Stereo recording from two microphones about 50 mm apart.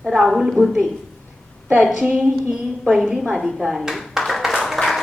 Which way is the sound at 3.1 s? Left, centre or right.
Centre.